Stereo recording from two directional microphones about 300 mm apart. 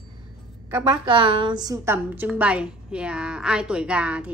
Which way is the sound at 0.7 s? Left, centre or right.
Centre.